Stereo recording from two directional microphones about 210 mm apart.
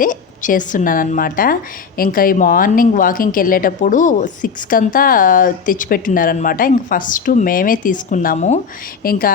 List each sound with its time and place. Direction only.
0.0 s a woman's voice: 40° left (ahead or behind)